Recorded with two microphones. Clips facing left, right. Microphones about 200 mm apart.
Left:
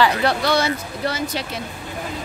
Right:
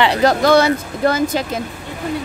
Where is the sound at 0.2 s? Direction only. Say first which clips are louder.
Right 7 dB; 45° right (ahead or behind).